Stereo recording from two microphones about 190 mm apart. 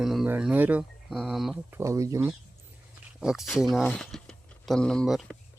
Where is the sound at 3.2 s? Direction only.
Centre (ahead or behind).